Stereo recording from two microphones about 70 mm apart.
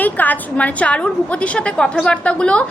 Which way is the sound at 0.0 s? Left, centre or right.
Left.